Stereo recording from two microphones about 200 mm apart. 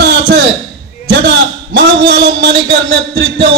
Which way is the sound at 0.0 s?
55° right (ahead or behind).